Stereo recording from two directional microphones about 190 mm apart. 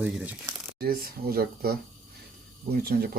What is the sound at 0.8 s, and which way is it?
Speech, 55° right (ahead or behind).